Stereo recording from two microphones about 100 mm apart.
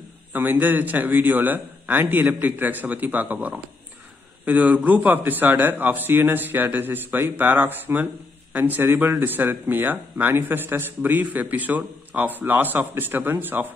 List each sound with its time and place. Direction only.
0.3 s a man's voice: 20° right (ahead or behind)